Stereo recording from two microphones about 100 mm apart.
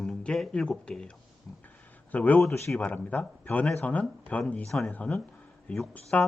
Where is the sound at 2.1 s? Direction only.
15° left (ahead or behind).